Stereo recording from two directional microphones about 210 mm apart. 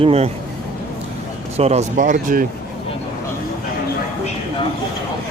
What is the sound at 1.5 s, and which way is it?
Speech, 30° right (ahead or behind).